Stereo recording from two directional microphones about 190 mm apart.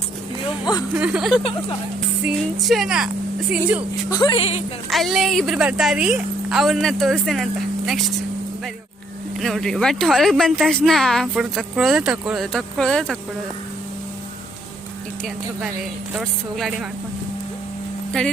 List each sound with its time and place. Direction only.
0.6 s speech: 20° left (ahead or behind)
0.9 s speech: 5° right (ahead or behind)
4.1 s speech: 25° left (ahead or behind)
4.9 s speech: centre (ahead or behind)
9.4 s speech: centre (ahead or behind)
16.1 s speech: centre (ahead or behind)